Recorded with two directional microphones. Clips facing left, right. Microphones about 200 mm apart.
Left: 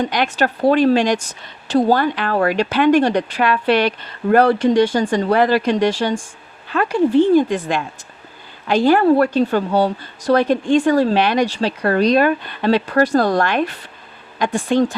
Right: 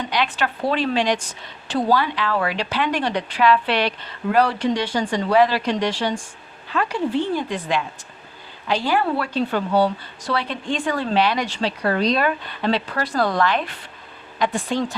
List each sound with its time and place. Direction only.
0.0 s a woman's voice: 45° left (ahead or behind)
7.3 s a woman's voice: 45° left (ahead or behind)